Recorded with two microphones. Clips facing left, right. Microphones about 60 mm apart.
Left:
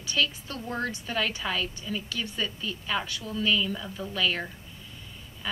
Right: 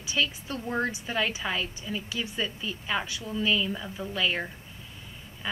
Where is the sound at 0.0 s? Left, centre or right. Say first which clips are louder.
Left 1 dB; centre.